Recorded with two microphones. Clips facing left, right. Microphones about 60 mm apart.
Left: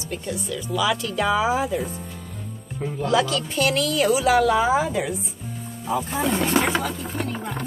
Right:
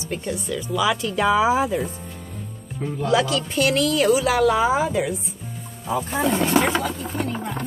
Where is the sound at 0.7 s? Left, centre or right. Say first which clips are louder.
Right 1 dB; right.